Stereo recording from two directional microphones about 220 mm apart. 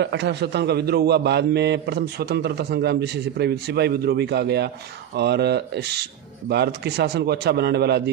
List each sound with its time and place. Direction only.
0.0 s a man's voice: 50° right (ahead or behind)